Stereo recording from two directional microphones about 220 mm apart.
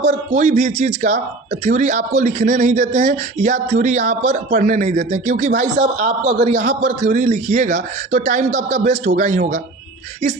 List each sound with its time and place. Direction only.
0.0 s speech: 35° right (ahead or behind)